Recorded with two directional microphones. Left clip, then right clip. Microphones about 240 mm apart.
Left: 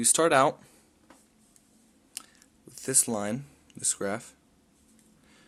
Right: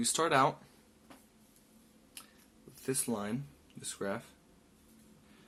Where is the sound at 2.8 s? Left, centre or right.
Left.